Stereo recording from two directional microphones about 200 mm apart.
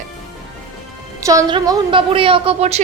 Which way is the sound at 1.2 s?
15° right (ahead or behind).